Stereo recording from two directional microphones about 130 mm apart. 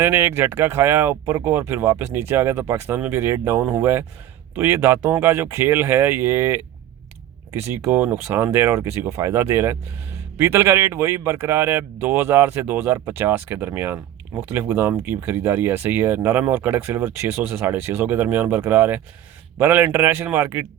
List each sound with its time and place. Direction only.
0.0 s speech: 20° right (ahead or behind)
7.9 s speech: 15° right (ahead or behind)